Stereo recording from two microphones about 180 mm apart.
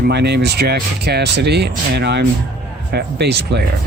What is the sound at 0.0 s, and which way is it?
Speech, 65° right (ahead or behind).